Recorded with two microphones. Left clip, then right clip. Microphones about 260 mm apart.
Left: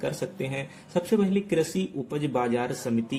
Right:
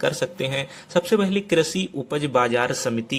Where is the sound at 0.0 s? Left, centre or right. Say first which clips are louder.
Right 7 dB; centre.